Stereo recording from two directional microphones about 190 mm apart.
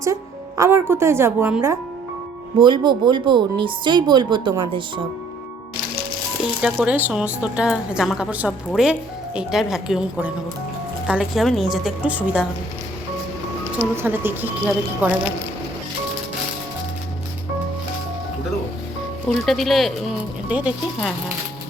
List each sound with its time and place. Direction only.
0.0 s a woman's voice: 15° right (ahead or behind)
2.6 s speech: 25° right (ahead or behind)
6.6 s a woman's voice: 5° right (ahead or behind)
13.9 s speech: 10° right (ahead or behind)
19.5 s a woman's voice: centre (ahead or behind)